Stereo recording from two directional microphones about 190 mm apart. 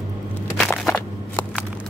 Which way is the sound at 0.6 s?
5° left (ahead or behind).